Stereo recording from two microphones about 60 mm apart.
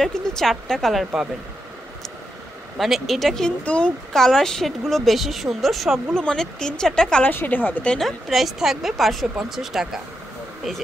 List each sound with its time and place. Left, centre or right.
0.0 s a woman's voice: centre
2.8 s a woman's voice: centre
3.6 s speech: centre
4.1 s a woman's voice: centre
6.2 s speech: centre
7.2 s speech: left
8.0 s a woman's voice: centre